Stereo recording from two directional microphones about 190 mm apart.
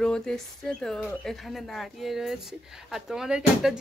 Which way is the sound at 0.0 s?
5° left (ahead or behind).